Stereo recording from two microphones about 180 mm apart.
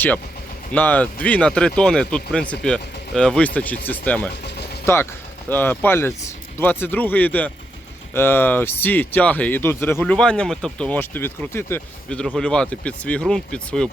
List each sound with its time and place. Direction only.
0.7 s speech: 10° left (ahead or behind)
4.4 s vehicle: 65° left (ahead or behind)
5.5 s speech: 10° left (ahead or behind)